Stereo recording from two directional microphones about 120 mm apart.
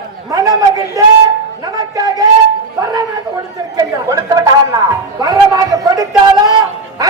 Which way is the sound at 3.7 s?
30° right (ahead or behind).